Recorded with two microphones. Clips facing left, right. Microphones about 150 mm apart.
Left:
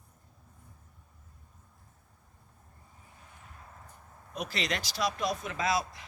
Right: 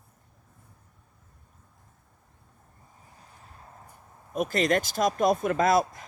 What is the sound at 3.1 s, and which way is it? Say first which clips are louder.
Vehicle: right 1 dB; 35° right (ahead or behind).